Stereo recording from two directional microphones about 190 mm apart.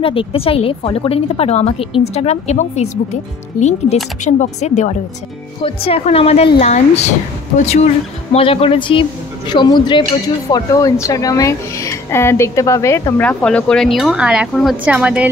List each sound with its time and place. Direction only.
0.0 s a woman's voice: 30° left (ahead or behind); by 15.2 s 5° right (ahead or behind)